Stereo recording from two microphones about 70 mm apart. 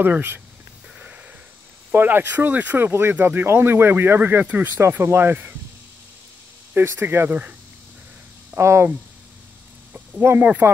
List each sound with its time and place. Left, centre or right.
0.0 s speech: right
0.9 s wheeze: centre
1.9 s speech: right
6.7 s speech: right
8.5 s speech: right
10.3 s speech: right